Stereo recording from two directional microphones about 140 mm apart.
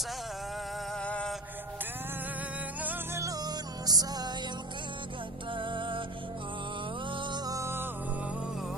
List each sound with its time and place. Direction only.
0.9 s music: 5° left (ahead or behind)
2.8 s music: 15° right (ahead or behind)
5.5 s music: 35° right (ahead or behind)
7.1 s music: 35° right (ahead or behind); by 7.9 s 20° right (ahead or behind)